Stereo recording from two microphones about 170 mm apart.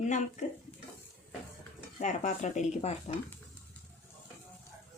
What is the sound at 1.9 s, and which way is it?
Speech, 45° left (ahead or behind).